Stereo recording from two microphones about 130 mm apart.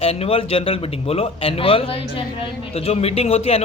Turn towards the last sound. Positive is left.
turn(degrees=50)  # may be behind; listen again after turning